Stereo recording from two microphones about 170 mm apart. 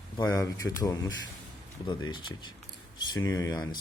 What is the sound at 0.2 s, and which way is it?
Speech, 20° left (ahead or behind).